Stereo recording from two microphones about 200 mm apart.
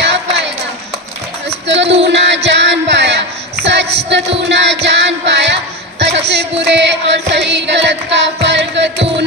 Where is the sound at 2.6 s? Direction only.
60° right (ahead or behind).